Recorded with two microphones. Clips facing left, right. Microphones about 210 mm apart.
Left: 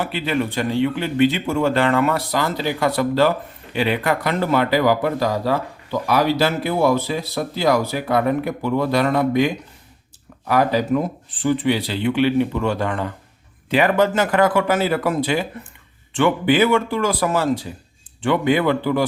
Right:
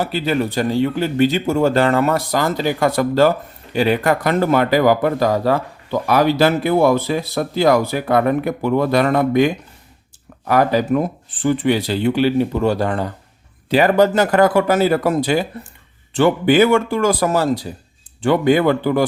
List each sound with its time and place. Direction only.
0.0 s speech: 40° right (ahead or behind)